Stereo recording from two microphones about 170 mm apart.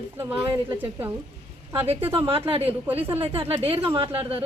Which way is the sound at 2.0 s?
15° right (ahead or behind).